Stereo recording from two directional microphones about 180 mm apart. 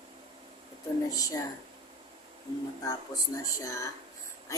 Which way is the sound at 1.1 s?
20° left (ahead or behind).